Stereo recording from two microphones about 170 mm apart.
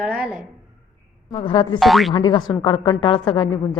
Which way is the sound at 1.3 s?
30° left (ahead or behind).